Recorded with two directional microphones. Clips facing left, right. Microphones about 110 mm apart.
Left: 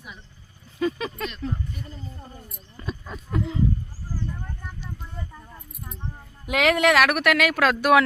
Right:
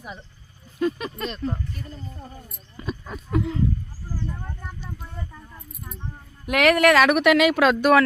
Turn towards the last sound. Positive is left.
turn(degrees=0)  # may be behind; listen again after turning